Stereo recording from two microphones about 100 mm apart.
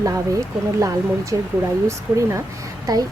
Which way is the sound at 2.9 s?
40° right (ahead or behind).